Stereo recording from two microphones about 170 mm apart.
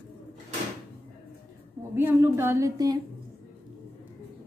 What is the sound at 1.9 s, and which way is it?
A woman's voice, 15° right (ahead or behind).